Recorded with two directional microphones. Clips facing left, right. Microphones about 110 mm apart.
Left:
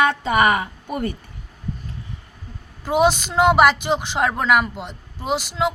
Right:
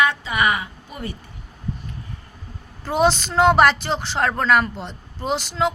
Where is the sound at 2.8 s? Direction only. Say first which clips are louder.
Left 1 dB; 10° left (ahead or behind).